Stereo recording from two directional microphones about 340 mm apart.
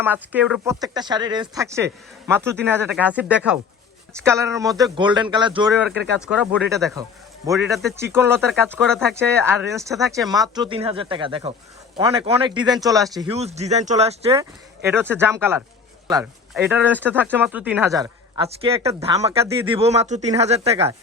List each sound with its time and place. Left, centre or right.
0.0 s speech: centre
6.0 s speech: centre
16.6 s speech: centre